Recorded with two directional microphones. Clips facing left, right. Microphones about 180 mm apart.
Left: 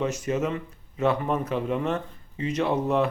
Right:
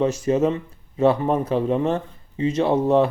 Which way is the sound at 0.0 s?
30° right (ahead or behind).